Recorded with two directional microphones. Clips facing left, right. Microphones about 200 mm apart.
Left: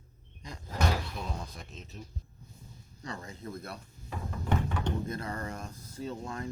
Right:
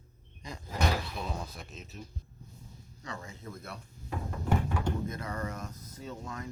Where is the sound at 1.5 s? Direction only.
5° right (ahead or behind).